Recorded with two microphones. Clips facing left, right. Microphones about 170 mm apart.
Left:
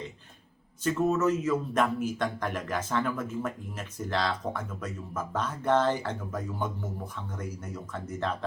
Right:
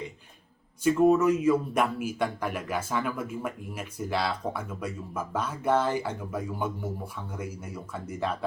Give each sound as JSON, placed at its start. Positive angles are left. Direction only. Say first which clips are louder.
{"t": 0.9, "sound": "speech", "louder": "right 5 dB", "side_deg": -10}